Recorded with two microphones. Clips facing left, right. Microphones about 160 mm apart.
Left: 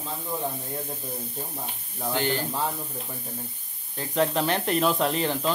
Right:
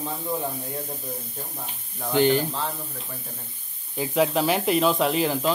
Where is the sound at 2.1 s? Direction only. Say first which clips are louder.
Right 8 dB; 15° right (ahead or behind).